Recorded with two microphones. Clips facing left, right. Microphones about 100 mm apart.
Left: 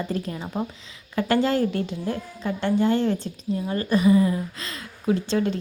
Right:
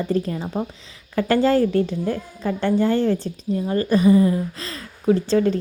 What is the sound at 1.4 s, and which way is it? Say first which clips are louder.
Speech: right 5 dB; 35° right (ahead or behind).